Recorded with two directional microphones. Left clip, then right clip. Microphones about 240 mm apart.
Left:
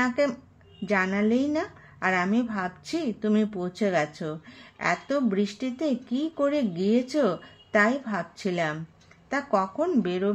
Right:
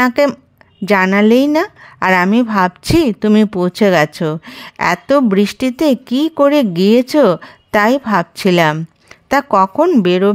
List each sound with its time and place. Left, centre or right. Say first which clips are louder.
0.0 s a woman's voice: right 12 dB; right